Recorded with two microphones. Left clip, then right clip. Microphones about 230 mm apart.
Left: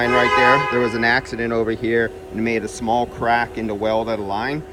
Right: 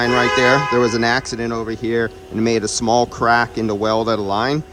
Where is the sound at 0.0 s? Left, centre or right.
Centre.